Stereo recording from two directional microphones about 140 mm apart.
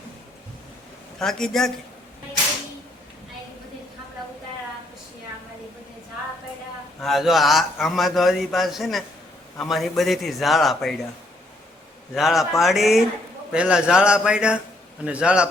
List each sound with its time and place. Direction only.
1.2 s a man's voice: 5° left (ahead or behind)
7.0 s a man's voice: centre (ahead or behind)
12.1 s a man's voice: centre (ahead or behind)